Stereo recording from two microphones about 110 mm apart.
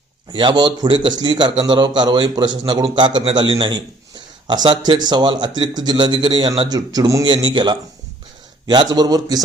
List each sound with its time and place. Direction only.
0.3 s a man's voice: 45° right (ahead or behind)
6.7 s speech: 35° right (ahead or behind)
7.3 s a man's voice: 45° right (ahead or behind)